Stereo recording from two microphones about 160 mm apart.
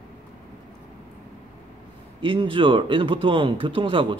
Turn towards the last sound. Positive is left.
turn(degrees=-30)  # may be behind; listen again after turning